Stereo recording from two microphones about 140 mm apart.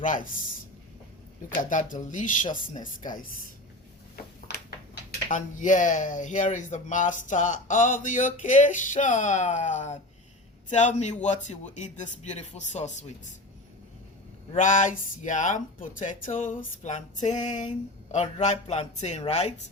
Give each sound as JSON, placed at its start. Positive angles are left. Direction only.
{"t": 0.0, "sound": "speech", "side_deg": 70}
{"t": 1.5, "sound": "speech", "side_deg": 70}
{"t": 5.3, "sound": "speech", "side_deg": 65}
{"t": 14.6, "sound": "speech", "side_deg": 65}